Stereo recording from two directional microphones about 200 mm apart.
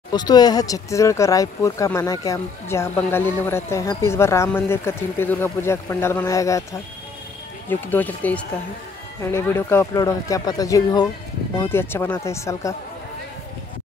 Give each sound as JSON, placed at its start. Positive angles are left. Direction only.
{"t": 0.1, "sound": "speech", "side_deg": 20}